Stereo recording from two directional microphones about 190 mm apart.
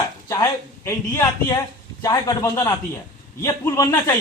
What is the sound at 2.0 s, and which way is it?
A man's voice, 20° left (ahead or behind).